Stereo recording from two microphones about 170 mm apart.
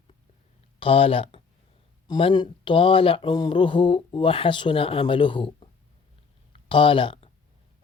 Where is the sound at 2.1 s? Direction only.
30° left (ahead or behind).